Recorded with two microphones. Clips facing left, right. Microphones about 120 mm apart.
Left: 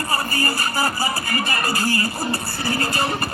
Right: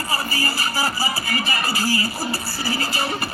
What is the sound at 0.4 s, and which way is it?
Music, 55° left (ahead or behind).